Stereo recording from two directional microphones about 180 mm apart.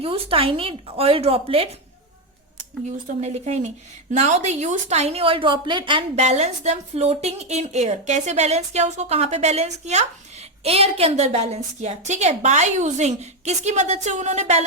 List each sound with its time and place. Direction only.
0.0 s a woman's voice: 30° right (ahead or behind)
3.2 s a woman's voice: 40° right (ahead or behind)